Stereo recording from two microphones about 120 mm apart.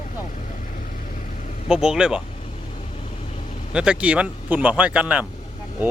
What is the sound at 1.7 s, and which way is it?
Speech, 5° right (ahead or behind).